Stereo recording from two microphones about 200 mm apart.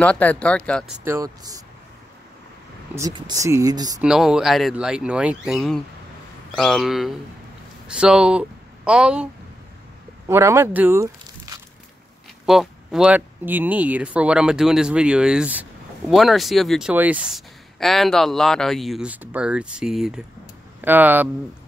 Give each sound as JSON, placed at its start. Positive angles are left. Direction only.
{"t": 0.0, "sound": "speech", "side_deg": 5}
{"t": 1.0, "sound": "speech", "side_deg": -15}
{"t": 3.0, "sound": "speech", "side_deg": -20}
{"t": 4.0, "sound": "speech", "side_deg": -5}
{"t": 12.4, "sound": "speech", "side_deg": 0}